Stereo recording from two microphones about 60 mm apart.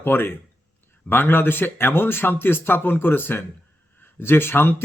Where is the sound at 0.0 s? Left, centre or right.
Left.